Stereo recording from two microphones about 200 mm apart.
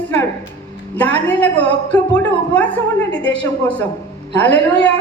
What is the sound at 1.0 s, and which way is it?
A woman's voice, 10° left (ahead or behind).